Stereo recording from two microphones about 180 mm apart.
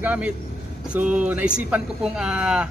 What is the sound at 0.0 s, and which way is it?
Speech, 10° right (ahead or behind).